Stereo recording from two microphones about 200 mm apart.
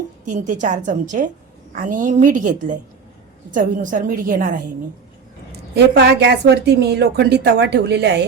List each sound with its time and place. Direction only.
0.3 s a woman's voice: 40° right (ahead or behind)
5.5 s a woman's voice: 55° right (ahead or behind)